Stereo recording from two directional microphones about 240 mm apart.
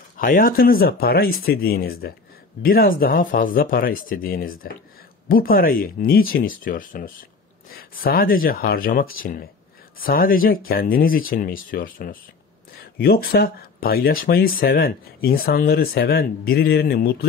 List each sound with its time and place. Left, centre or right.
0.2 s speech: left